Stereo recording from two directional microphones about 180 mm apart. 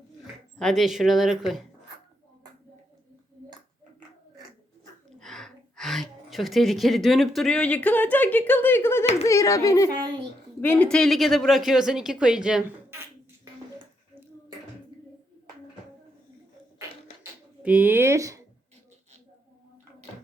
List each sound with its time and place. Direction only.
0.6 s speech: centre (ahead or behind)
5.2 s a woman's voice: centre (ahead or behind); by 13.5 s 15° right (ahead or behind)
17.6 s speech: 10° right (ahead or behind)